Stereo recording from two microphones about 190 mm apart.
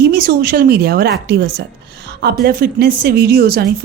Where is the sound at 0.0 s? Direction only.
55° right (ahead or behind).